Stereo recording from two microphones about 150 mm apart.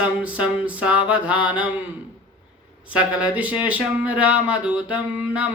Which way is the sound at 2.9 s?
5° right (ahead or behind).